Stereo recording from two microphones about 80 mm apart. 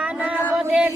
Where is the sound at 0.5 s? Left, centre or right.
Centre.